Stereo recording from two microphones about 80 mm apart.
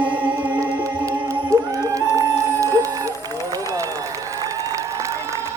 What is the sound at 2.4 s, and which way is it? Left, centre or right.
Run, right.